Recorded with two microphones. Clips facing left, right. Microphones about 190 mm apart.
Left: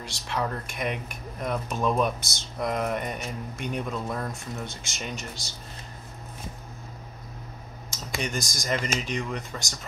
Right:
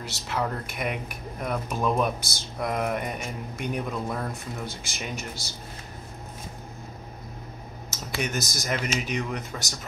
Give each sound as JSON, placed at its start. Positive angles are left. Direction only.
{"t": 0.0, "sound": "speech", "side_deg": -5}
{"t": 7.9, "sound": "speech", "side_deg": -5}